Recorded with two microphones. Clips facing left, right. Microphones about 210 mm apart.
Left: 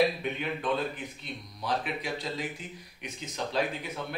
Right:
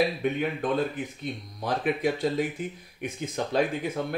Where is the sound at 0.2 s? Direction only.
50° right (ahead or behind).